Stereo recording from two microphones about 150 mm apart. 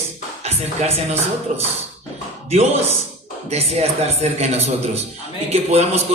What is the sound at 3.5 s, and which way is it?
Speech, 45° right (ahead or behind).